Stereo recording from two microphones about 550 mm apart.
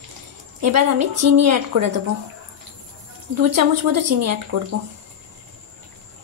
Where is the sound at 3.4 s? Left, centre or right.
Right.